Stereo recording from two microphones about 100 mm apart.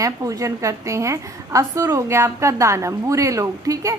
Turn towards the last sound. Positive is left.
turn(degrees=-35)  # may be behind; listen again after turning